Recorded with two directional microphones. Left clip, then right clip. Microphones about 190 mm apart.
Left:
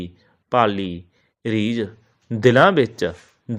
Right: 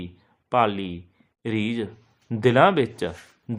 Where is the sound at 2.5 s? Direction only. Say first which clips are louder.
Left 3 dB; 15° left (ahead or behind).